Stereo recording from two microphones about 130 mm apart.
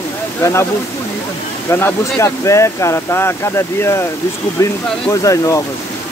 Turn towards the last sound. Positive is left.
turn(degrees=25)  # may be behind; listen again after turning